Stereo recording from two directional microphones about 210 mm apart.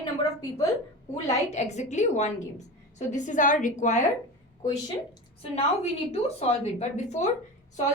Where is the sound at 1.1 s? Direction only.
30° left (ahead or behind).